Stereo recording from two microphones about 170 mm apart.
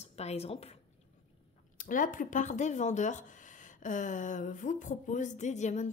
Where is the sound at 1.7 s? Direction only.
50° left (ahead or behind).